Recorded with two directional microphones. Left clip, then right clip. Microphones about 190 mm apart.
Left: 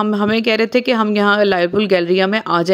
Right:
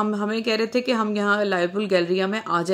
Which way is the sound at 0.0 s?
45° left (ahead or behind).